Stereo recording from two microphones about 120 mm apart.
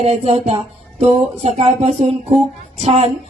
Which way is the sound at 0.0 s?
60° right (ahead or behind).